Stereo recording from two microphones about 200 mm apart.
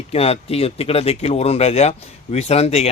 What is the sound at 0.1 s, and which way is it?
A man's voice, 30° left (ahead or behind).